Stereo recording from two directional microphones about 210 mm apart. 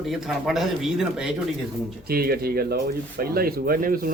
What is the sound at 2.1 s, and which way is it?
Speech, 45° right (ahead or behind).